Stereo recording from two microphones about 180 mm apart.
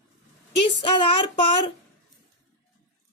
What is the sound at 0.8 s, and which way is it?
Speech, 30° left (ahead or behind).